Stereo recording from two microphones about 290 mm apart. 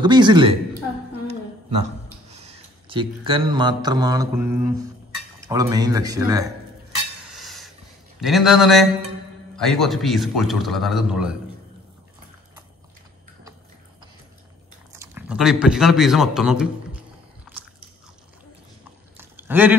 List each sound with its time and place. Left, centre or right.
0.0 s speech: centre
2.3 s speech: right
7.3 s a sound: centre
8.2 s a man's voice: centre
14.9 s speech: centre
19.1 s a sound: centre